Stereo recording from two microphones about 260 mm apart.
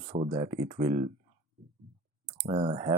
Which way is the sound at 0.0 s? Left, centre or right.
Right.